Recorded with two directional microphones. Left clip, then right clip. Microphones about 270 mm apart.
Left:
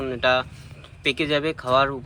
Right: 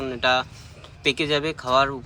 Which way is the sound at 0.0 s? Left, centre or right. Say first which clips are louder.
Left 1 dB; centre.